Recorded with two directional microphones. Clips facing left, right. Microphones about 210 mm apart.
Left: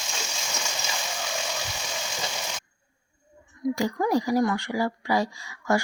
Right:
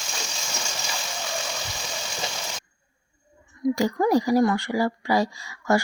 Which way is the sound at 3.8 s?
35° right (ahead or behind).